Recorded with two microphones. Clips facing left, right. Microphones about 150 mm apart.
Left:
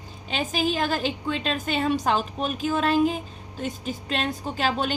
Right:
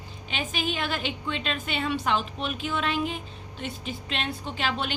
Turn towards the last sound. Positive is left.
turn(degrees=40)  # may be behind; listen again after turning